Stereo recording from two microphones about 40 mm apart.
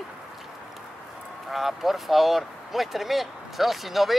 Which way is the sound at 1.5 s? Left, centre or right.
Centre.